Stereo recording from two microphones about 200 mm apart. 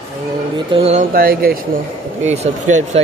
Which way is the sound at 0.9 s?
45° right (ahead or behind).